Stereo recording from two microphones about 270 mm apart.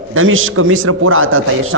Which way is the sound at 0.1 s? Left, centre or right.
Right.